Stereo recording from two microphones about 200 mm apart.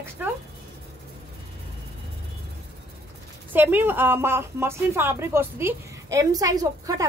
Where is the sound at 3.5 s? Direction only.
10° right (ahead or behind).